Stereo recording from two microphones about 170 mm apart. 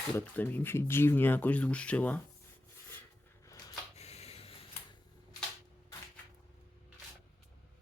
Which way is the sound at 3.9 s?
40° left (ahead or behind).